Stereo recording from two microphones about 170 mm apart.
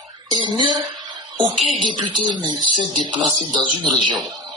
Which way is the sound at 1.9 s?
25° right (ahead or behind).